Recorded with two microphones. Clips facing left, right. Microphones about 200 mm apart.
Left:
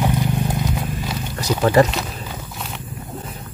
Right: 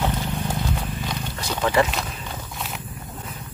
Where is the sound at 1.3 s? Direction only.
40° left (ahead or behind).